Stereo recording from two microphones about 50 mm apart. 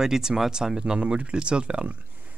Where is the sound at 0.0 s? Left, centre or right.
Centre.